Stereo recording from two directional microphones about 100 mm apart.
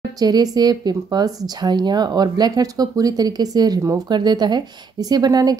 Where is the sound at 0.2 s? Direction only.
40° right (ahead or behind).